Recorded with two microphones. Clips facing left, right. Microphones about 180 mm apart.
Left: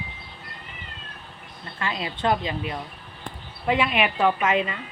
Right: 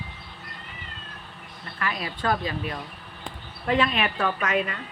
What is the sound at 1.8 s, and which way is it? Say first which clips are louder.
A woman's voice: left 2 dB; 25° left (ahead or behind).